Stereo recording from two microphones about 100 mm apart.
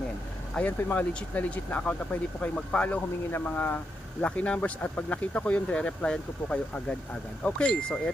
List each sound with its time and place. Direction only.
0.5 s speech: 15° left (ahead or behind)